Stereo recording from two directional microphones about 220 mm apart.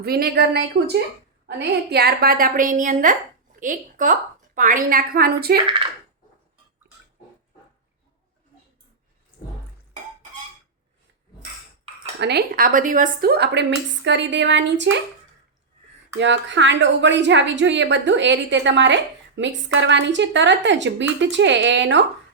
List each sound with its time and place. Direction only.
0.0 s a woman's voice: 45° right (ahead or behind)
12.2 s a woman's voice: 45° right (ahead or behind)
16.1 s a woman's voice: 55° right (ahead or behind)